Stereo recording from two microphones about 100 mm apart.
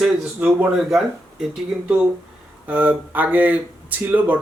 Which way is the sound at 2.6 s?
15° right (ahead or behind).